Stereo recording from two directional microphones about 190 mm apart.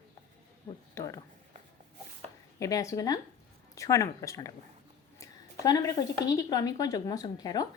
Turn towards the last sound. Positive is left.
turn(degrees=20)  # may be behind; listen again after turning